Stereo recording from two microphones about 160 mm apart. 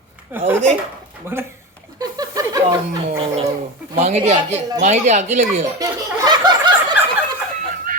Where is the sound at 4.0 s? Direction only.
45° right (ahead or behind).